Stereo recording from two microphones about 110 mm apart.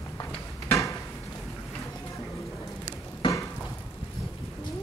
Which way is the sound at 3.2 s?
45° left (ahead or behind).